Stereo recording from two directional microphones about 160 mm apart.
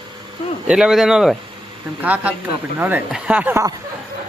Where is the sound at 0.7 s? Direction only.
5° right (ahead or behind).